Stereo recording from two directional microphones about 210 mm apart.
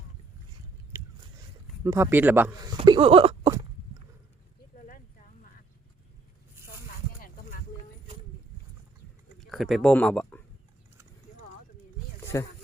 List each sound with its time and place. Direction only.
1.8 s speech: 15° right (ahead or behind)
2.7 s a sound: 25° right (ahead or behind)
9.4 s speech: centre (ahead or behind)
12.3 s speech: 15° left (ahead or behind)